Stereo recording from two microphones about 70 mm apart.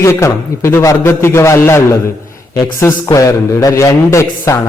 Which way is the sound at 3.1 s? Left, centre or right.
Left.